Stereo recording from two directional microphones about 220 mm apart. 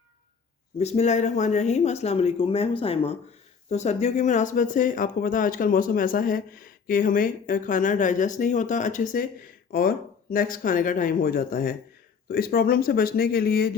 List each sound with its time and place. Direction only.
0.8 s speech: 30° left (ahead or behind)